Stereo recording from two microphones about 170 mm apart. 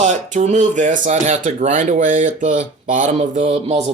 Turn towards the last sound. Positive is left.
turn(degrees=-40)  # may be behind; listen again after turning